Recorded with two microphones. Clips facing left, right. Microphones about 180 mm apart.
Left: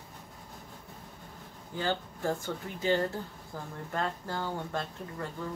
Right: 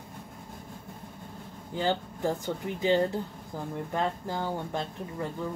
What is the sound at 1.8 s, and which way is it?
Speech, 20° right (ahead or behind).